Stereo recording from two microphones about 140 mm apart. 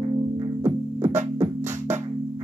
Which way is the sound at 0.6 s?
20° right (ahead or behind).